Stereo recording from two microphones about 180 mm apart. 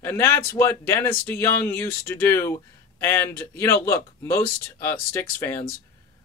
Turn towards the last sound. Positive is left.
turn(degrees=15)  # may be behind; listen again after turning